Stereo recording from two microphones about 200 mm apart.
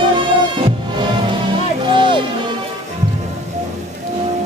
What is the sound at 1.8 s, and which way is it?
Music, 25° right (ahead or behind).